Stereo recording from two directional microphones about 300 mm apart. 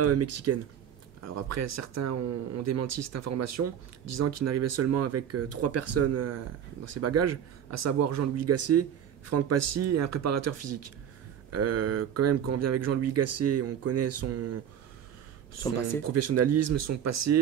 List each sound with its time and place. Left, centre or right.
0.0 s speech: right
15.6 s speech: centre
16.1 s speech: right